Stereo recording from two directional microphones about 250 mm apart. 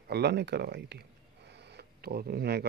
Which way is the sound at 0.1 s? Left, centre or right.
Right.